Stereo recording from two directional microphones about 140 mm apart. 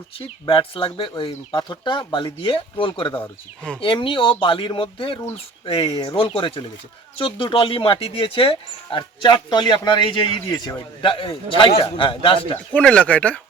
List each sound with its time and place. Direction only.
0.4 s speech: 40° left (ahead or behind)
12.7 s speech: 10° left (ahead or behind)